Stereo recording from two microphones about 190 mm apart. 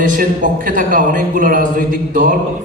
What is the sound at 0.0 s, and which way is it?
A man's voice, 45° right (ahead or behind).